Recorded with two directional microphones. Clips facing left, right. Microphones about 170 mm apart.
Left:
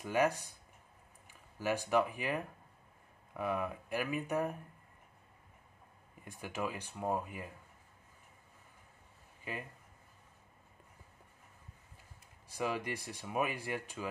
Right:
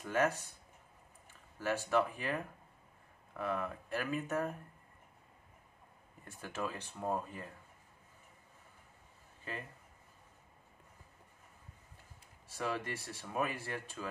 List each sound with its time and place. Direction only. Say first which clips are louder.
0.0 s speech: left 1 dB; 15° left (ahead or behind)
1.6 s speech: left 1 dB; 15° left (ahead or behind)
6.2 s speech: left 1 dB; 15° left (ahead or behind)
9.4 s a man's voice: left 1 dB; 10° left (ahead or behind)
12.4 s speech: left 2 dB; 15° left (ahead or behind)